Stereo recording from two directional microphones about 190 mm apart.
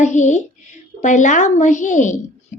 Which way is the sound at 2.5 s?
40° left (ahead or behind).